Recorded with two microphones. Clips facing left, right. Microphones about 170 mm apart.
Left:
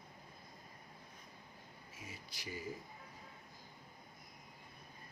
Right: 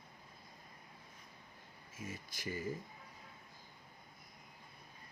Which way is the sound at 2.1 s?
50° right (ahead or behind).